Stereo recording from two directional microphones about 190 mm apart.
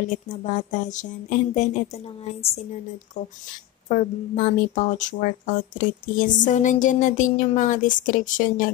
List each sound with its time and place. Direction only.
0.1 s speech: 40° left (ahead or behind)
3.9 s speech: 40° left (ahead or behind)